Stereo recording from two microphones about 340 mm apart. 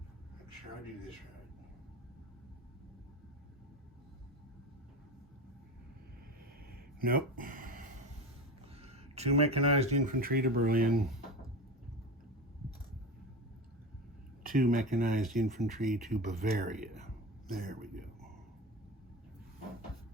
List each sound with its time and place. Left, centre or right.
6.7 s a sound: right
8.7 s speech: centre
14.4 s speech: right
15.4 s speech: centre
16.4 s speech: right